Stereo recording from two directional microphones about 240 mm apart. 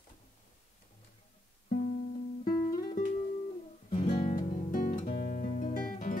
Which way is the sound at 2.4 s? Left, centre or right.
Left.